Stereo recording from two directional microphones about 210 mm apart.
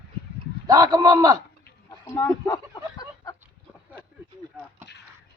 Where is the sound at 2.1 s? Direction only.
15° left (ahead or behind).